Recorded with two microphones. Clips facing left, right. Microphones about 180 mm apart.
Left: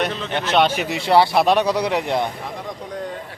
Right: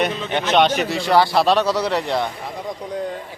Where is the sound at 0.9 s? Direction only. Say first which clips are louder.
Left 2 dB; 25° left (ahead or behind).